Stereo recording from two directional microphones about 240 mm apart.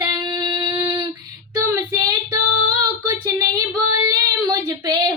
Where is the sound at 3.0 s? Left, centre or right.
Centre.